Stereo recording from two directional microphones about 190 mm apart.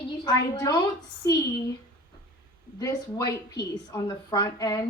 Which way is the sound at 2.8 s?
20° left (ahead or behind).